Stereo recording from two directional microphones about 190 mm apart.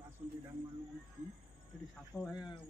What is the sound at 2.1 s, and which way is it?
Speech, centre (ahead or behind).